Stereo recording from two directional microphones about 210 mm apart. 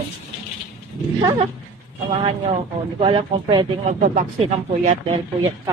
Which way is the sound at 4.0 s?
35° right (ahead or behind).